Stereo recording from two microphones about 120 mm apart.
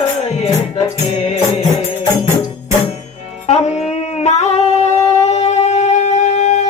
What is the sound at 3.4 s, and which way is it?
Singing, 65° left (ahead or behind).